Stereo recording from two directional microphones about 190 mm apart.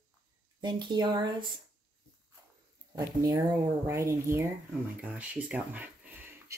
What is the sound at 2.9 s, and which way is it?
Speech, 20° right (ahead or behind).